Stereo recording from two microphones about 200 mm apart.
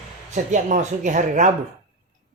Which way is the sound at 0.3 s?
40° right (ahead or behind).